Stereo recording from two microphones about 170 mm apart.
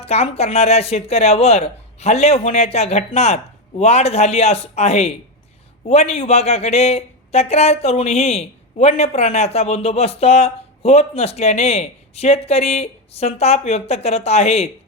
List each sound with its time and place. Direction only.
0.0 s speech: 40° left (ahead or behind)